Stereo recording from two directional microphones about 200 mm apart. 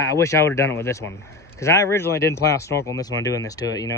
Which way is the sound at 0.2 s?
15° left (ahead or behind).